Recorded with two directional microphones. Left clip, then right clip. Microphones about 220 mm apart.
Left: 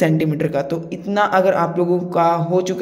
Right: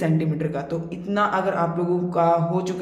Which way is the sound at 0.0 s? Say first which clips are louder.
Left 7 dB; 35° left (ahead or behind).